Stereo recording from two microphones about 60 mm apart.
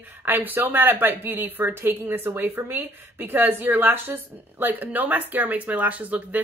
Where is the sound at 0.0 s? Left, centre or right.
Right.